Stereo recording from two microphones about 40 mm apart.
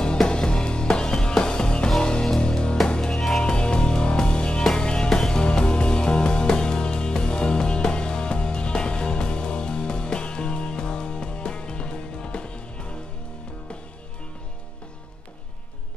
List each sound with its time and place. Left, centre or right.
0.0 s music: left
3.2 s music: centre
3.4 s music: left